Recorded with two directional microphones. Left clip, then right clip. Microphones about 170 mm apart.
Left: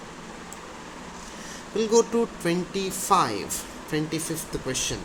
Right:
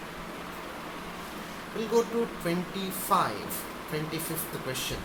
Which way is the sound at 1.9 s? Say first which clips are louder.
Left 5 dB; 60° left (ahead or behind).